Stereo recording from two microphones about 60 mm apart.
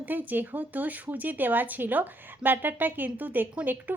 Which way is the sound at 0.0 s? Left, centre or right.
Right.